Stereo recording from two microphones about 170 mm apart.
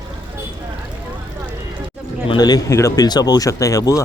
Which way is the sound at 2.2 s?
25° left (ahead or behind).